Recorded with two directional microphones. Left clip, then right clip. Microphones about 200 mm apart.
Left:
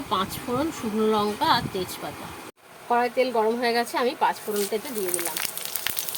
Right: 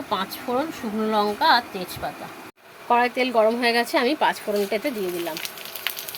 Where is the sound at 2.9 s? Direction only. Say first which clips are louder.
Right 2 dB; 45° right (ahead or behind).